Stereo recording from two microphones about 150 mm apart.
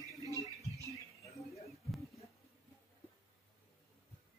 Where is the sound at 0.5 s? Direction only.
20° right (ahead or behind).